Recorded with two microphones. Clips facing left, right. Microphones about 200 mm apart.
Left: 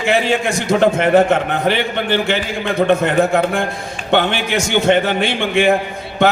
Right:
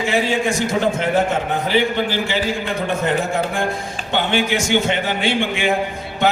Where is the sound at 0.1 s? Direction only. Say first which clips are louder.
Left 4 dB; 65° left (ahead or behind).